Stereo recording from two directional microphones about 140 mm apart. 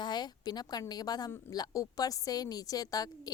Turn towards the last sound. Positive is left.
turn(degrees=25)  # may be behind; listen again after turning